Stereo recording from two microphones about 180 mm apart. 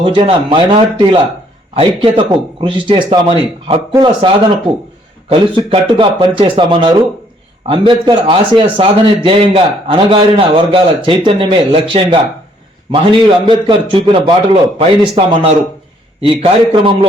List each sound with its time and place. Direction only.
0.0 s a man's voice: 30° right (ahead or behind)